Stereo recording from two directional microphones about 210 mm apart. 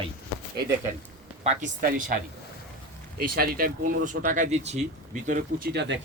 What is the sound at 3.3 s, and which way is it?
Speech, 45° right (ahead or behind).